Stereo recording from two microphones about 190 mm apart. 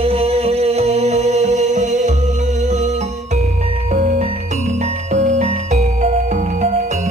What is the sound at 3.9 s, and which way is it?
Music, 35° right (ahead or behind).